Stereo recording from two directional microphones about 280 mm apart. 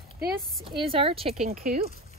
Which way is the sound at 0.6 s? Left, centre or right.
Centre.